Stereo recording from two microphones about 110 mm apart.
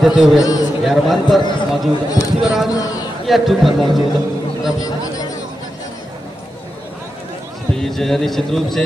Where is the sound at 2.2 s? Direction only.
35° left (ahead or behind).